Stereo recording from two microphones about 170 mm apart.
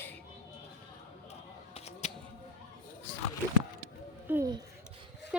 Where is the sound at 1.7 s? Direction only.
40° left (ahead or behind).